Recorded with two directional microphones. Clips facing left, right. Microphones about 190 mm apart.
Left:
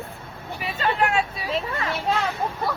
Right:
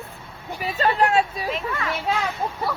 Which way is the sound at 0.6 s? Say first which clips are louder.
Right 3 dB; 35° right (ahead or behind).